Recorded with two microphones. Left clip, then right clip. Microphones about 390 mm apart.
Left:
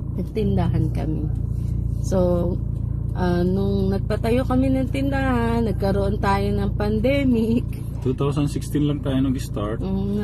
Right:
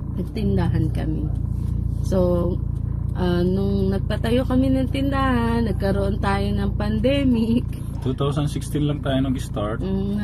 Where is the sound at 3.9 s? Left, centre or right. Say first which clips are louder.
Left 1 dB; centre.